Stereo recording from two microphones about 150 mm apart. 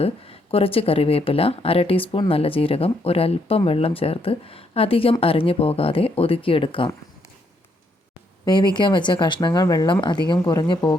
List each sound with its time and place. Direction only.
0.0 s speech: 40° left (ahead or behind)
8.4 s speech: 30° left (ahead or behind)